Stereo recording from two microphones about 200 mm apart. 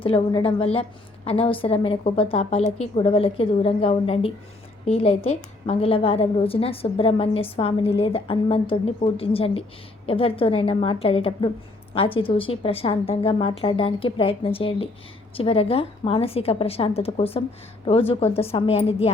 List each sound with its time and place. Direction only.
0.0 s a woman's voice: 25° left (ahead or behind)